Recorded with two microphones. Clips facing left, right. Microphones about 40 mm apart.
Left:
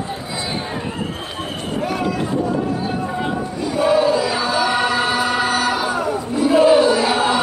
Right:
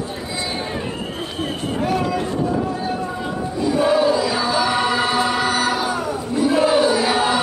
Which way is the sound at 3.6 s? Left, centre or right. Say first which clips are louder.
Even; centre.